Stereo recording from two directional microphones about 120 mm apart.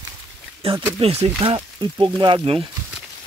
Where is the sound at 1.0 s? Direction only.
55° right (ahead or behind).